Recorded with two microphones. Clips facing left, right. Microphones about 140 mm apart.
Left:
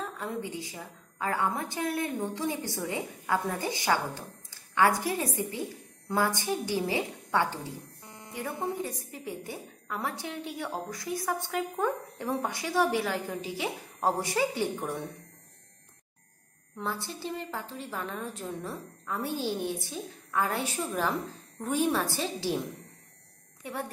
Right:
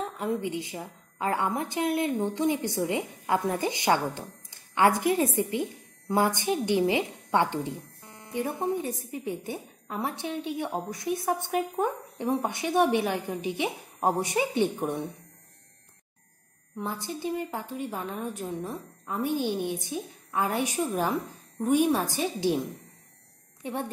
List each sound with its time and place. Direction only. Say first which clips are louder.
0.0 s a woman's voice: right 5 dB; 20° right (ahead or behind)
16.7 s a woman's voice: right 2 dB; 15° right (ahead or behind)
23.6 s a woman's voice: right 4 dB; 20° right (ahead or behind)